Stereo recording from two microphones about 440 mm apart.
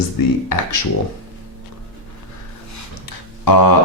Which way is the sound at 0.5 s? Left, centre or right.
Left.